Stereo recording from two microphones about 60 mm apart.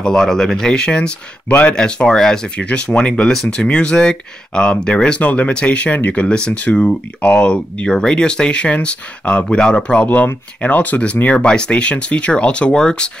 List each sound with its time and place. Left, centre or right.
0.0 s speech: centre; by 6.2 s left
6.2 s speech: centre
10.0 s speech: left